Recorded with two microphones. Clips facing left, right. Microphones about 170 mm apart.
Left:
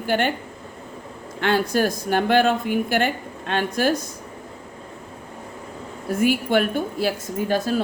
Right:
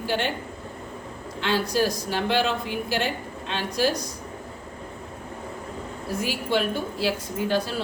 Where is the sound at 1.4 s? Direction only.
55° left (ahead or behind).